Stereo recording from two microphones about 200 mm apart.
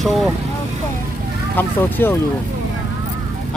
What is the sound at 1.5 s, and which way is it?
Speech, 10° left (ahead or behind).